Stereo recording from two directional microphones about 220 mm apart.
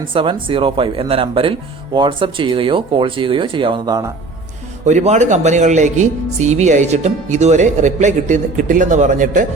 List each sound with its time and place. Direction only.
0.1 s speech: 25° right (ahead or behind)
4.9 s speech: 30° right (ahead or behind)